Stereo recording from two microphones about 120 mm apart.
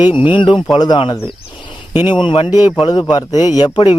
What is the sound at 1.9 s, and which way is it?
Speech, 15° right (ahead or behind).